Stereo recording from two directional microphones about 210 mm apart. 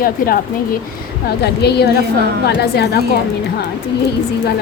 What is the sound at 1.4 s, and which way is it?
Speech, 50° left (ahead or behind).